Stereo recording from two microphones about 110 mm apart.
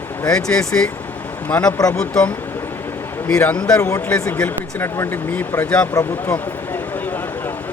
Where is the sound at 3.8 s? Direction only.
25° left (ahead or behind).